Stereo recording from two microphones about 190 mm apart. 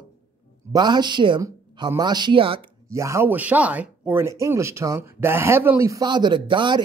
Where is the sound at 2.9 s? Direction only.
15° right (ahead or behind).